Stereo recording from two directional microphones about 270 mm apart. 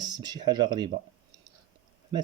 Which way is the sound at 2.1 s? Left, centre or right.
Centre.